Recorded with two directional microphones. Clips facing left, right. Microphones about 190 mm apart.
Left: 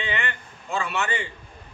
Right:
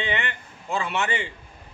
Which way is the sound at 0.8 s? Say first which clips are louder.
Right 2 dB; 20° right (ahead or behind).